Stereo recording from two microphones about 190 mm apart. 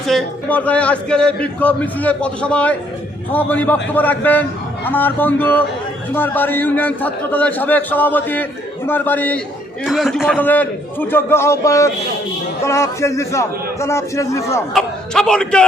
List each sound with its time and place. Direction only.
0.1 s a man's voice: 5° left (ahead or behind)
14.7 s a man's voice: 5° left (ahead or behind)